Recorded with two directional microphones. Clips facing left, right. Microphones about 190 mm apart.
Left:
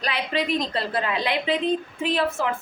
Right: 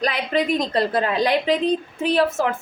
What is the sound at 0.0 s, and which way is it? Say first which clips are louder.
A woman's voice: right 5 dB; 45° right (ahead or behind).